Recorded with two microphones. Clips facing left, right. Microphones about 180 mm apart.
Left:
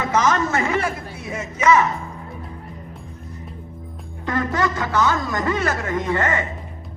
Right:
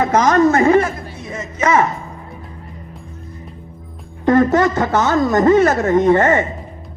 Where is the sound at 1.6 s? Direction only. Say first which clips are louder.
Right 1 dB; 55° right (ahead or behind).